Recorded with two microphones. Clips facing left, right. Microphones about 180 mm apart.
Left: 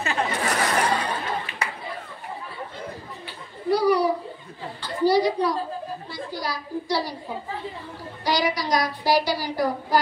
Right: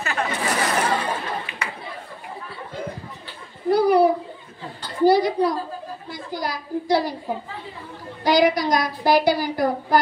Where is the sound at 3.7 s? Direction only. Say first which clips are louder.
Right 4 dB; 55° right (ahead or behind).